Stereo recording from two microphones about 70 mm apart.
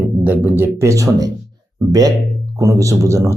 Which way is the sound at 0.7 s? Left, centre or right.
Right.